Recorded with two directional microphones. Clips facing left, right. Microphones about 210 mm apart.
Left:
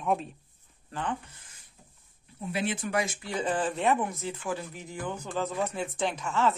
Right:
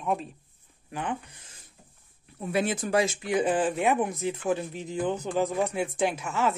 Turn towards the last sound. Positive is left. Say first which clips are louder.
# right 1 dB
turn(degrees=-10)  # may be behind; listen again after turning